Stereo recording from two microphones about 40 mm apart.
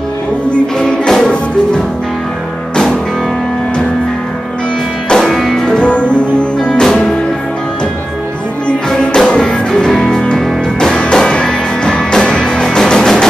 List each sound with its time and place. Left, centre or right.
0.5 s music: centre
2.7 s music: centre
5.1 s music: centre
5.6 s music: left
6.8 s music: centre
8.9 s music: centre